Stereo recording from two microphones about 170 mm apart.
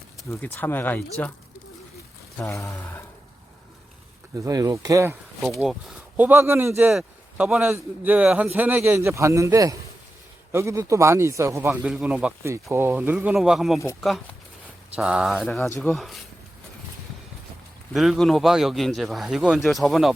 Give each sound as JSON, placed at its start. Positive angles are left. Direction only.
{"t": 0.3, "sound": "speech", "side_deg": 10}
{"t": 2.4, "sound": "speech", "side_deg": 15}
{"t": 4.4, "sound": "speech", "side_deg": -20}
{"t": 5.4, "sound": "a man's voice", "side_deg": 0}
{"t": 14.9, "sound": "speech", "side_deg": -5}
{"t": 17.9, "sound": "speech", "side_deg": 0}